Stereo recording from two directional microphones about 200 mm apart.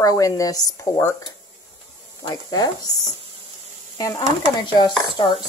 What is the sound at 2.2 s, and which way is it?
Speech, 20° left (ahead or behind).